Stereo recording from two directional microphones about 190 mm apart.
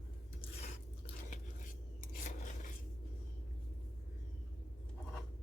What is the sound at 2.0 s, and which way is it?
Scissors, 40° left (ahead or behind).